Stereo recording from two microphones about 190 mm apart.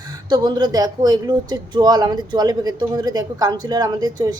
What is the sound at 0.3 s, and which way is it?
Speech, 20° right (ahead or behind).